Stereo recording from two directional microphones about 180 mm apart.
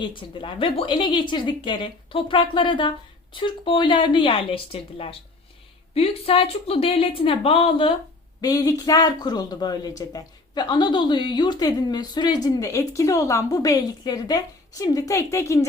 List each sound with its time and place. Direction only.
0.0 s a woman's voice: 30° left (ahead or behind)
8.4 s a woman's voice: 20° left (ahead or behind)